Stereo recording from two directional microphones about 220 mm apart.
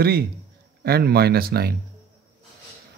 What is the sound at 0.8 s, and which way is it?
Speech, 45° right (ahead or behind).